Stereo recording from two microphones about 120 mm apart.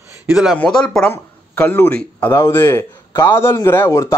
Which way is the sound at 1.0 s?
15° left (ahead or behind).